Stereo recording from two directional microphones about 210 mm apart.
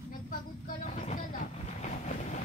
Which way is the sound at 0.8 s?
35° left (ahead or behind).